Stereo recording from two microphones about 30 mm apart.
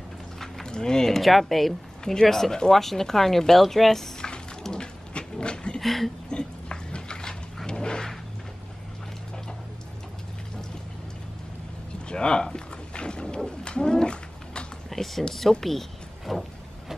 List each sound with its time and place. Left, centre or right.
0.7 s speech: left
1.1 s speech: centre
4.7 s a sound: left
5.8 s speech: centre
6.3 s a sound: left
7.6 s vehicle: left
12.1 s speech: left
12.5 s wild animals: left
13.7 s cat: left
14.9 s speech: centre